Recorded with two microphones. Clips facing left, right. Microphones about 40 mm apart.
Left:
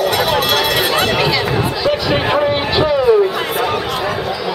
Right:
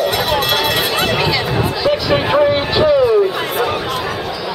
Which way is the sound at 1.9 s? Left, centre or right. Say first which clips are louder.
Right 1 dB; centre.